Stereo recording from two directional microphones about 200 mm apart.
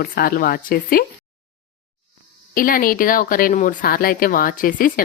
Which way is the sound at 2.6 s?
45° left (ahead or behind).